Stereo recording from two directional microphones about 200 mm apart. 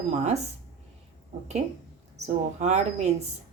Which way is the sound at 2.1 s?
35° right (ahead or behind).